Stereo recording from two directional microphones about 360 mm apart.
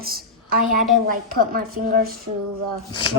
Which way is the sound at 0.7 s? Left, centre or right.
Right.